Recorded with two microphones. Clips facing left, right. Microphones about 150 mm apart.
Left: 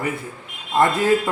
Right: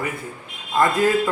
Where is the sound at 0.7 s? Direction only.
25° left (ahead or behind).